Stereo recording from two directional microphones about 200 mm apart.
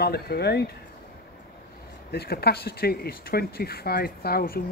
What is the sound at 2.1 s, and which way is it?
Speech, 50° left (ahead or behind).